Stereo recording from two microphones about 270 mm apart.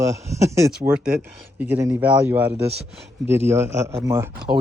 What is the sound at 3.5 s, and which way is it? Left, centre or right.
Speech, centre.